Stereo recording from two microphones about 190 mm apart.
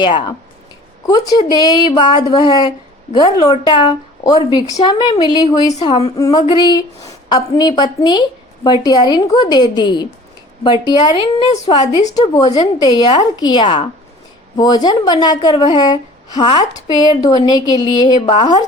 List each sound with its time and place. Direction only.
0.0 s a woman's voice: 25° left (ahead or behind)